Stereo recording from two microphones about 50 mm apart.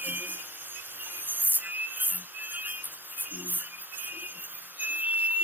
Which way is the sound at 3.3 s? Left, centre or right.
Right.